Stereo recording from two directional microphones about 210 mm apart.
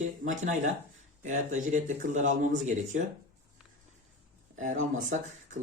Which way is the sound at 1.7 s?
35° right (ahead or behind).